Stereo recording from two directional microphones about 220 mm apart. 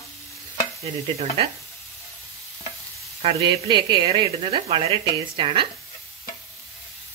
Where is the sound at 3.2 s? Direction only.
20° right (ahead or behind).